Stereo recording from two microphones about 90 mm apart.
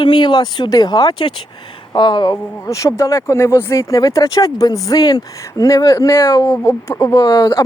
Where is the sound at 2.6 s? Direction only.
35° left (ahead or behind).